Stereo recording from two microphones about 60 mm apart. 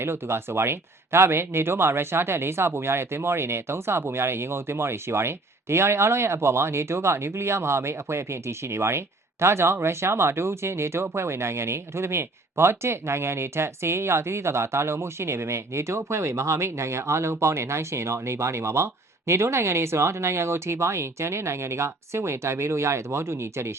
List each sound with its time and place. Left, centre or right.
0.0 s speech: right